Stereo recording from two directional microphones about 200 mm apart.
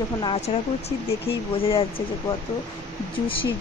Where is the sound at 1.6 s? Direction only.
30° left (ahead or behind).